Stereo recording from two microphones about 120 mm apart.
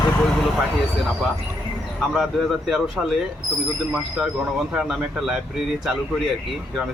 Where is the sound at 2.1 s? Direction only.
Centre (ahead or behind).